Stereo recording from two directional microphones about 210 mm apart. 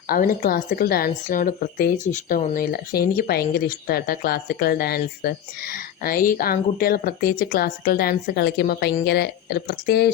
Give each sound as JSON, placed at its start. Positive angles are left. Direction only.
{"t": 0.1, "sound": "speech", "side_deg": 45}